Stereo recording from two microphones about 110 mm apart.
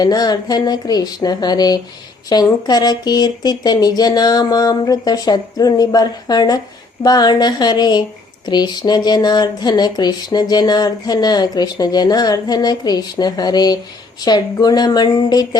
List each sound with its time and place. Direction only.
0.0 s speech: 35° left (ahead or behind)